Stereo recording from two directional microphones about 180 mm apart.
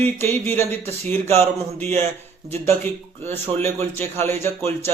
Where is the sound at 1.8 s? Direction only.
10° left (ahead or behind).